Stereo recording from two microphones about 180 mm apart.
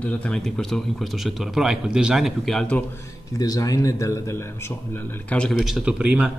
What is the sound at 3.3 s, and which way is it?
A man's voice, 20° left (ahead or behind).